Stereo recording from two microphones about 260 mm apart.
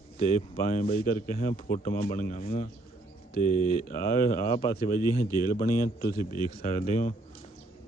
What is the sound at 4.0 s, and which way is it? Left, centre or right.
Speech, left.